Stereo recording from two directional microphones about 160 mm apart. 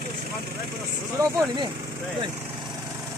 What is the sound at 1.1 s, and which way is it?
Speech, 25° right (ahead or behind).